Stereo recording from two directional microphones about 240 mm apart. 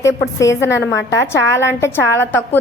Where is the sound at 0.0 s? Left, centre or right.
Centre.